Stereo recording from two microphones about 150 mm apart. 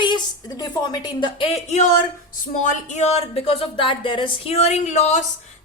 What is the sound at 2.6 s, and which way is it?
Speech, 55° left (ahead or behind).